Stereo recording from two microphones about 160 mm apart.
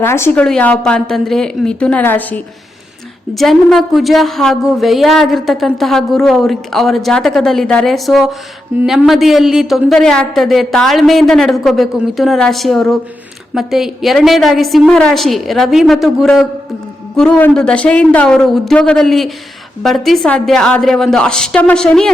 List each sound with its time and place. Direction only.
0.0 s a woman's voice: 15° left (ahead or behind)